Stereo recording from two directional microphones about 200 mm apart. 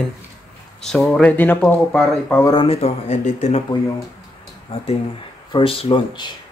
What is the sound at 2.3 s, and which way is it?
Speech, 20° left (ahead or behind).